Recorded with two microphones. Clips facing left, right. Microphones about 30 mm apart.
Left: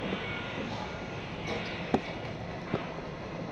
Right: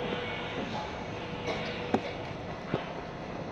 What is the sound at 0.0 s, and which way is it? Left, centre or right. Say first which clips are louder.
Music: right 1 dB; centre.